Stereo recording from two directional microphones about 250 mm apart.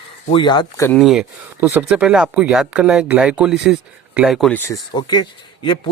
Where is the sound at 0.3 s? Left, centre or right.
Centre.